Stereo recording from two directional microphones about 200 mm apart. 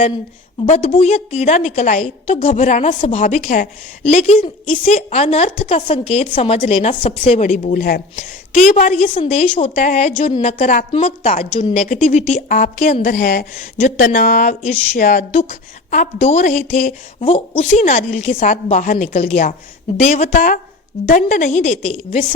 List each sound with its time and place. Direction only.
0.6 s a woman's voice: 30° left (ahead or behind); by 8.0 s 45° left (ahead or behind)
8.1 s a woman's voice: 35° left (ahead or behind)
17.7 s a woman's voice: 40° left (ahead or behind)